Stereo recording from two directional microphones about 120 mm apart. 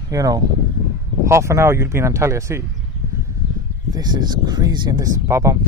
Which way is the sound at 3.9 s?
35° right (ahead or behind).